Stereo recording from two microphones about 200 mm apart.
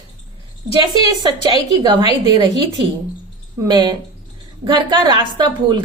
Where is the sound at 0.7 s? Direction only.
25° left (ahead or behind).